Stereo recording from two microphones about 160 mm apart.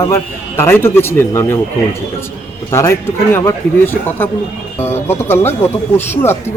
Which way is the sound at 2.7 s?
15° left (ahead or behind).